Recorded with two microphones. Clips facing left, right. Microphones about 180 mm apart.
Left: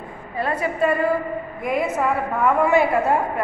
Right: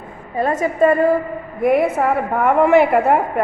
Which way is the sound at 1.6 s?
60° right (ahead or behind).